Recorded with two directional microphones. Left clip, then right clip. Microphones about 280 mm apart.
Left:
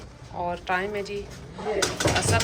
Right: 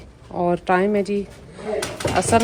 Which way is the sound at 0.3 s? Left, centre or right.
Right.